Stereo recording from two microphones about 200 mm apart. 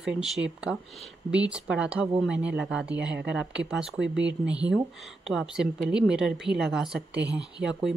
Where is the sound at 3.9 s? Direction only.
65° right (ahead or behind).